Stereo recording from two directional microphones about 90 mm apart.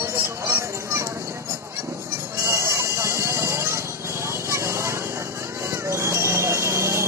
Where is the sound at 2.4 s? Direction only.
35° right (ahead or behind).